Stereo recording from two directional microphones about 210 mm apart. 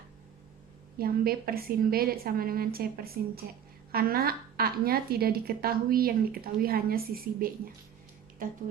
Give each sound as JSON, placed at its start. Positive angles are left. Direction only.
{"t": 0.9, "sound": "a woman's voice", "side_deg": -45}
{"t": 8.4, "sound": "music", "side_deg": -40}